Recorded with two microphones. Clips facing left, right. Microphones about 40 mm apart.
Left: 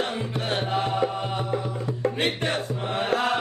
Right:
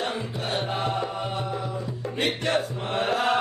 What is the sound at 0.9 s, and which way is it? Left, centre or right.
Music, centre.